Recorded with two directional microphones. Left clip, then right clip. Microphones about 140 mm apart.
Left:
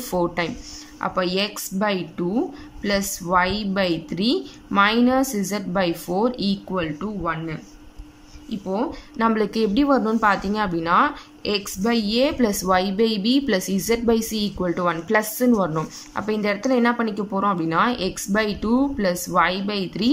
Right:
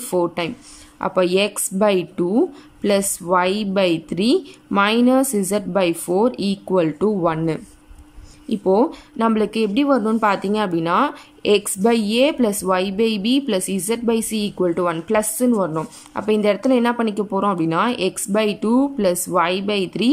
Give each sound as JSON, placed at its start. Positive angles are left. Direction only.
{"t": 0.1, "sound": "speech", "side_deg": -15}
{"t": 6.8, "sound": "speech", "side_deg": -35}
{"t": 9.2, "sound": "speech", "side_deg": -10}